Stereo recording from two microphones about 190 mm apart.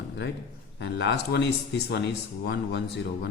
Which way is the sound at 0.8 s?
65° left (ahead or behind).